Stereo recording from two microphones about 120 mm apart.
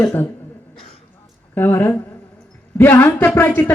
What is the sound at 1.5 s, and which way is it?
A man's voice, 15° left (ahead or behind).